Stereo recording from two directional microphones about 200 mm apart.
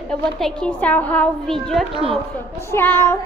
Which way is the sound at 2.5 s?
10° left (ahead or behind).